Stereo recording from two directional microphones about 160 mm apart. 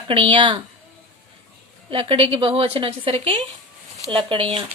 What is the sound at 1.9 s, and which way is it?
A woman's voice, 35° right (ahead or behind).